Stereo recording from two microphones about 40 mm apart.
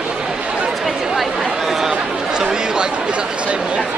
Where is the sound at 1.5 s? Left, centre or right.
Centre.